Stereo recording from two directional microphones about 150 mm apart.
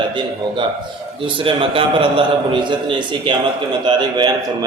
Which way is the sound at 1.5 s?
35° right (ahead or behind).